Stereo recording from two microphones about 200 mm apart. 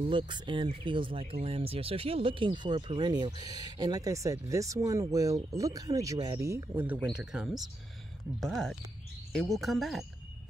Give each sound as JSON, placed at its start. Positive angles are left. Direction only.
{"t": 0.0, "sound": "speech", "side_deg": -25}